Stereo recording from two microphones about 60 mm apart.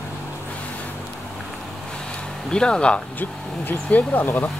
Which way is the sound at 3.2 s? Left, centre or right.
Left.